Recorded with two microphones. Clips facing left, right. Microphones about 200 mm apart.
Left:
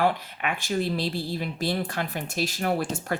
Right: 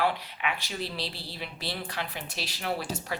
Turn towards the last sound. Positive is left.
turn(degrees=50)  # may be behind; listen again after turning